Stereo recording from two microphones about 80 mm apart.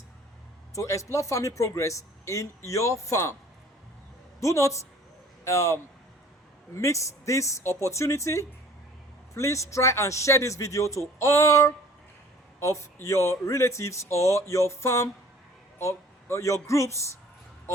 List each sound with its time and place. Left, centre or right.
0.8 s speech: left
4.4 s a man's voice: left